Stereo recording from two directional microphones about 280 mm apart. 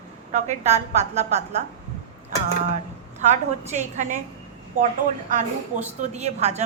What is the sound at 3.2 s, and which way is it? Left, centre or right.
Speech, right.